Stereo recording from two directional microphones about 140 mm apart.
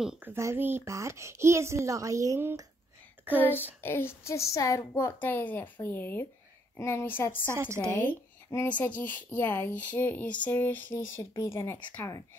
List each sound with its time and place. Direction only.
0.2 s a woman's voice: 20° right (ahead or behind)
3.8 s speech: 15° left (ahead or behind)